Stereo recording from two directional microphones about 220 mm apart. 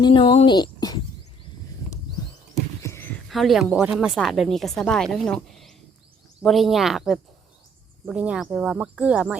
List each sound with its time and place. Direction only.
0.0 s speech: 20° left (ahead or behind)
2.8 s a sound: 10° left (ahead or behind)
3.2 s speech: centre (ahead or behind)